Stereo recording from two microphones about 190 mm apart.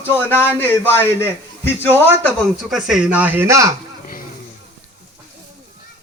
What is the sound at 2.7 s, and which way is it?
Speech, 5° right (ahead or behind).